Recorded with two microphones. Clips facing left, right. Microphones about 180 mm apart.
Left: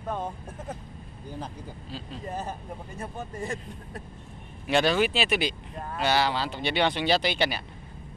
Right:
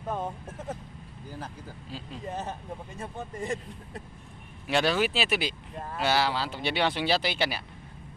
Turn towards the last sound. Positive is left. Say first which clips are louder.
# left 2 dB
turn(degrees=-5)  # may be behind; listen again after turning